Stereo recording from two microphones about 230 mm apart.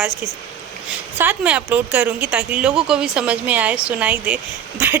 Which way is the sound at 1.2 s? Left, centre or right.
Centre.